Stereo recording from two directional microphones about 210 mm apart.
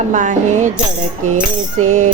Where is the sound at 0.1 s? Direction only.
35° right (ahead or behind).